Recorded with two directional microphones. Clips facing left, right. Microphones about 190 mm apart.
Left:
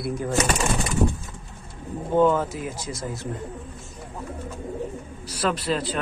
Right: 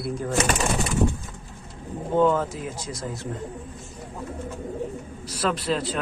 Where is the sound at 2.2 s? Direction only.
5° left (ahead or behind).